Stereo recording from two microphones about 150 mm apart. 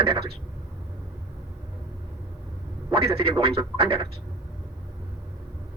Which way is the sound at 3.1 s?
40° right (ahead or behind).